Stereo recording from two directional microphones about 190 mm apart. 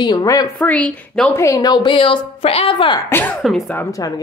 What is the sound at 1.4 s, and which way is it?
Speech, 20° left (ahead or behind).